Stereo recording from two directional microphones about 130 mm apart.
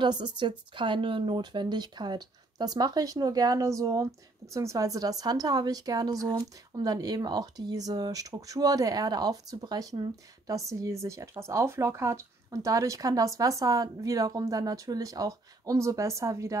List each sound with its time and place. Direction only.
0.0 s speech: 35° right (ahead or behind)